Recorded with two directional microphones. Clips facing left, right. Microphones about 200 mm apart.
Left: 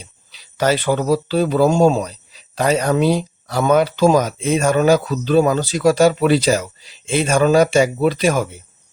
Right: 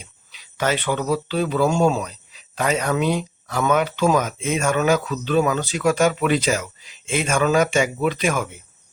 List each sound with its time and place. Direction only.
0.0 s speech: 35° left (ahead or behind)